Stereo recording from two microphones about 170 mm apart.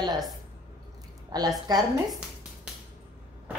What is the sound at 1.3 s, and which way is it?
Speech, 25° right (ahead or behind).